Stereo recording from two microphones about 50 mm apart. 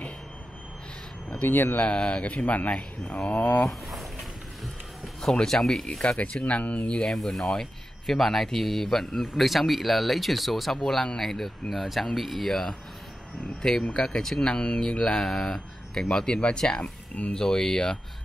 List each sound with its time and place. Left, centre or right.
1.5 s speech: left
1.8 s speech: left
3.6 s a sound: centre
5.3 s speech: centre